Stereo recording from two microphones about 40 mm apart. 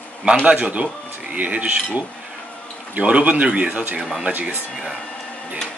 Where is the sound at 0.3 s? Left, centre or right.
Right.